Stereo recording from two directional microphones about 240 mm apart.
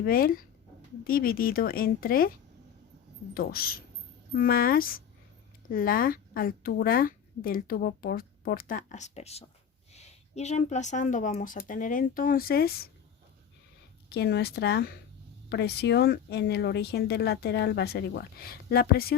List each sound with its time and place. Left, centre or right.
0.0 s speech: left
3.3 s speech: left
14.1 s speech: left